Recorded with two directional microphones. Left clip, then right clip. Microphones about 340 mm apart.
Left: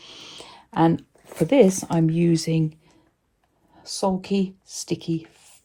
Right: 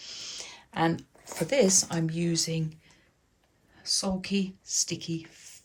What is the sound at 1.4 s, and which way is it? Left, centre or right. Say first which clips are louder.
Speech: left 6 dB; centre.